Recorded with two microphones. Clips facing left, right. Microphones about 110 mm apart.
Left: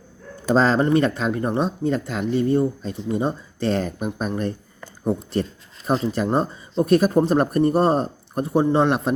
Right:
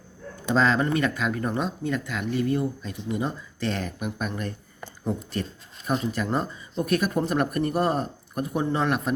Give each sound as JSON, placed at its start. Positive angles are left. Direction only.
{"t": 0.5, "sound": "speech", "side_deg": 35}